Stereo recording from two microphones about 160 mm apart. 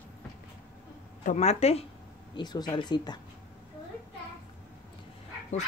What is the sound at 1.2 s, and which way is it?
Speech, 45° left (ahead or behind).